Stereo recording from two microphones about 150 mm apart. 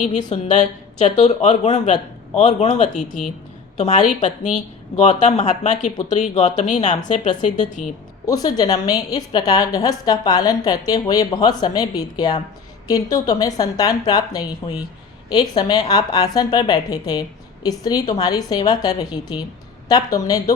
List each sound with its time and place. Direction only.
0.0 s speech: 55° left (ahead or behind)
8.3 s a woman's voice: 25° left (ahead or behind)